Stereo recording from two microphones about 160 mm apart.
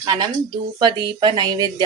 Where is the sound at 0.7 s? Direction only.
25° right (ahead or behind).